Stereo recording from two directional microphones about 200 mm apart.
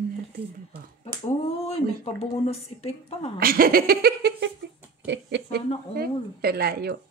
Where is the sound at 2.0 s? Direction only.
30° left (ahead or behind).